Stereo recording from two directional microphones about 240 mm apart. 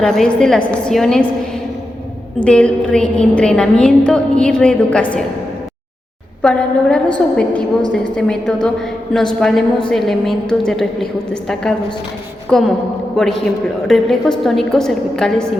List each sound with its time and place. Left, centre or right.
0.0 s a woman's voice: centre
2.4 s a woman's voice: centre
6.4 s a woman's voice: centre